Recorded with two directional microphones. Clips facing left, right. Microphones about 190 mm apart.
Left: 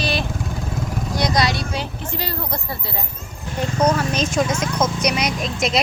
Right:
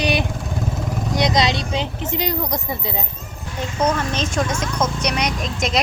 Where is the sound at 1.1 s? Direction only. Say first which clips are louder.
Right 2 dB; 20° right (ahead or behind).